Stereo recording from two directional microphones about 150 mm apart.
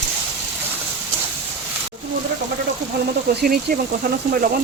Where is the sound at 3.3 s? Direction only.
85° right.